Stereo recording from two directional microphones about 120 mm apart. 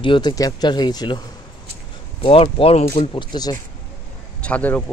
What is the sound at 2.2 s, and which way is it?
Speech, 50° left (ahead or behind).